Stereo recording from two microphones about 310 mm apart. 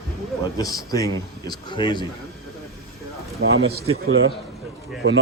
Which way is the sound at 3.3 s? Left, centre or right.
Right.